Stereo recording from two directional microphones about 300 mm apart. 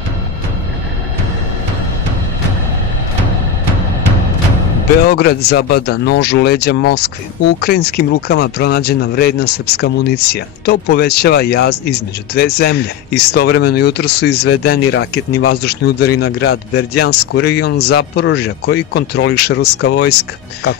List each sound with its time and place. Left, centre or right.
5.1 s speech: left